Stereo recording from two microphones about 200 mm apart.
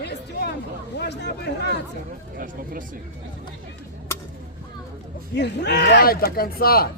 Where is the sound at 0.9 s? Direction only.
60° left (ahead or behind).